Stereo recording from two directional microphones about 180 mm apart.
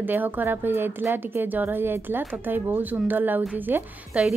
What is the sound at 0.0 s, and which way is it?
Speech, 10° right (ahead or behind).